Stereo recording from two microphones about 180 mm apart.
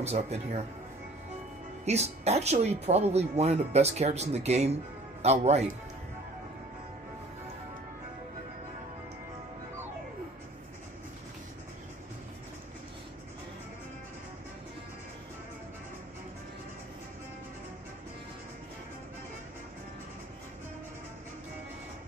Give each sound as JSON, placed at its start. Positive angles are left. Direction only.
{"t": 0.0, "sound": "speech", "side_deg": -35}
{"t": 1.9, "sound": "speech", "side_deg": -35}